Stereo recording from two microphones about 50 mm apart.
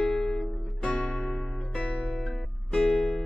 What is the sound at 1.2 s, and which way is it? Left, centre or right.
Music, centre.